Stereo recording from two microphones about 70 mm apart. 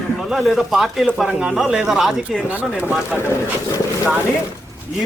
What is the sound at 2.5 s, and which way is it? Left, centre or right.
Speech, right.